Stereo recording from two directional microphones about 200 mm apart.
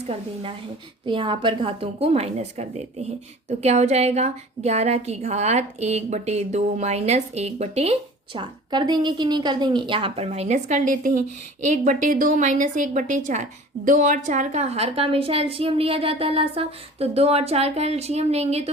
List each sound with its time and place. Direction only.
0.0 s a woman's voice: 30° right (ahead or behind)